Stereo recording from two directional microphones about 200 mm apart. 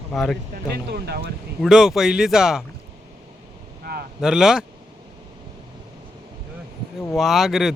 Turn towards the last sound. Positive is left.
turn(degrees=0)  # may be behind; listen again after turning